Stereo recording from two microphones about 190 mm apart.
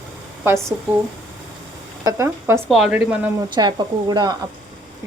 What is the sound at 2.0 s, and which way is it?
Speech, 15° right (ahead or behind).